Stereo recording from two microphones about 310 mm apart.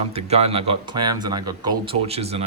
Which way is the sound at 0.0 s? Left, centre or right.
Centre.